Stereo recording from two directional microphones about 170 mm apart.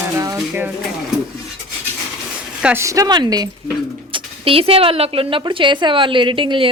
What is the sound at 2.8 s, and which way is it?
Speech, 20° right (ahead or behind).